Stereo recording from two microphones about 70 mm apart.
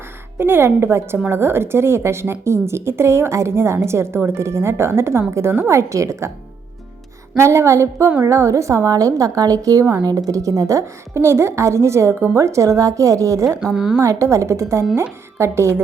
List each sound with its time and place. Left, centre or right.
0.3 s a woman's voice: right
7.3 s a woman's voice: right
13.7 s a woman's voice: centre
14.0 s a woman's voice: right